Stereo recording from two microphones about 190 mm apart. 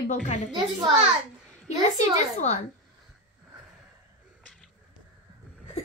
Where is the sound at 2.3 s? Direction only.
35° left (ahead or behind).